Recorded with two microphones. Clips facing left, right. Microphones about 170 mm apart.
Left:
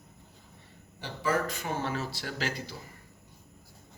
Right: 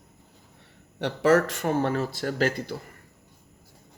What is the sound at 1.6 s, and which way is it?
Speech, 50° right (ahead or behind).